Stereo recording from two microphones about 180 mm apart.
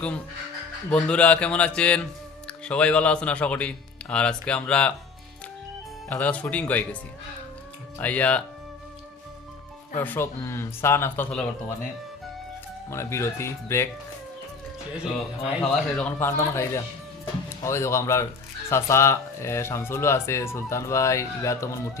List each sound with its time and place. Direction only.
0.9 s speech: 5° left (ahead or behind)
6.1 s speech: 10° left (ahead or behind)
7.9 s speech: 10° left (ahead or behind)
10.0 s speech: 10° left (ahead or behind)
12.9 s speech: 15° left (ahead or behind)
15.1 s speech: centre (ahead or behind)